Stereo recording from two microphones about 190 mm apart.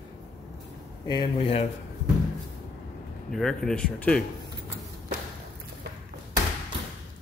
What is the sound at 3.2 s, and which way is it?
Speech, centre (ahead or behind).